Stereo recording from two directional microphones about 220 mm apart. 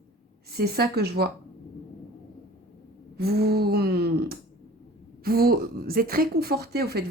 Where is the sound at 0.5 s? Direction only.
45° right (ahead or behind).